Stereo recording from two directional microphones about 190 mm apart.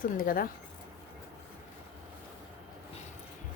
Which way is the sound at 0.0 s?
45° left (ahead or behind).